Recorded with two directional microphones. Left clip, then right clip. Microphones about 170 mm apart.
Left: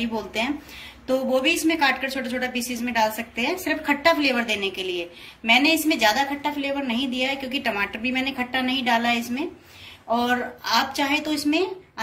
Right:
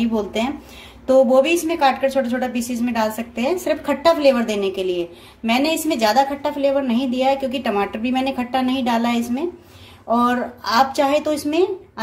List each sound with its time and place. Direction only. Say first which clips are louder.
0.0 s a woman's voice: right 5 dB; 50° right (ahead or behind)